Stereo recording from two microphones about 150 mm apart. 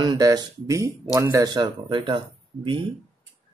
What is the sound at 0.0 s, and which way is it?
Speech, 25° right (ahead or behind).